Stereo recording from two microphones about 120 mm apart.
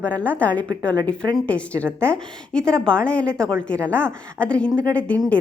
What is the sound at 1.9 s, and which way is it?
Speech, 20° right (ahead or behind).